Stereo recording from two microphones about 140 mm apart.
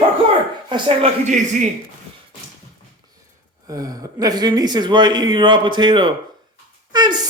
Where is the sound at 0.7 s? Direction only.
45° right (ahead or behind).